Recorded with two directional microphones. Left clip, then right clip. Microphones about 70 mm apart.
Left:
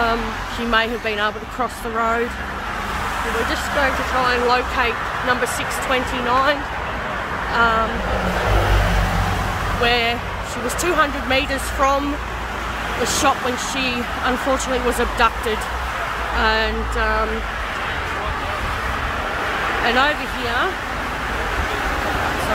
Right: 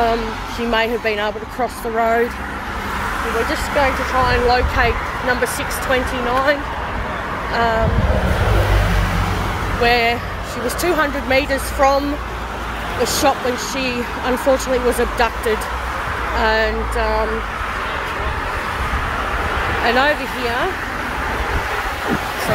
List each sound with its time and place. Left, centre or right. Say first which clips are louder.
0.7 s speech: right 2 dB; centre
3.4 s speech: right 2 dB; centre
9.8 s speech: right 3 dB; centre
10.8 s speech: even; centre
11.8 s speech: right 3 dB; centre
13.0 s speech: right 2 dB; centre
16.3 s speech: right 2 dB; centre
19.8 s speech: right 2 dB; centre